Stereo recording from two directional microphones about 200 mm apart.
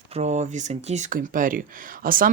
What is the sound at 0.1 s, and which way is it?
Speech, 35° right (ahead or behind).